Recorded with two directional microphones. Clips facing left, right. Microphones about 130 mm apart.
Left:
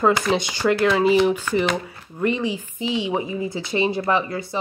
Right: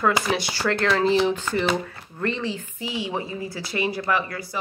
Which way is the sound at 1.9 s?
15° left (ahead or behind).